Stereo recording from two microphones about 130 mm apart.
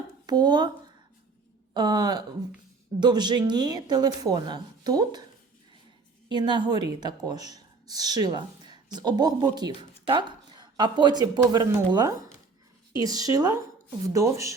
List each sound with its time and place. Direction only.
0.3 s speech: 30° right (ahead or behind)
1.7 s speech: 35° right (ahead or behind)
6.2 s a woman's voice: 35° right (ahead or behind)